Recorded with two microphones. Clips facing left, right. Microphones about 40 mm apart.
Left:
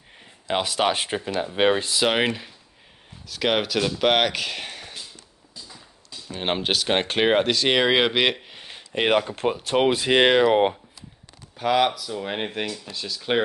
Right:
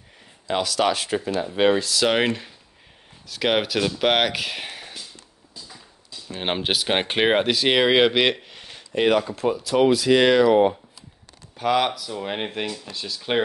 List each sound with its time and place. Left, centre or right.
0.2 s speech: left
2.0 s speech: centre
6.4 s speech: centre; by 9.3 s left
9.3 s speech: left
11.5 s speech: centre